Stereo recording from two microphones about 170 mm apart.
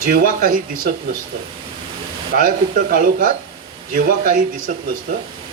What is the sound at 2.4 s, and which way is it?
Speech, 55° right (ahead or behind).